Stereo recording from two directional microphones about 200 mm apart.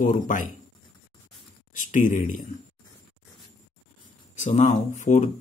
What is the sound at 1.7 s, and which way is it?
Speech, 40° left (ahead or behind).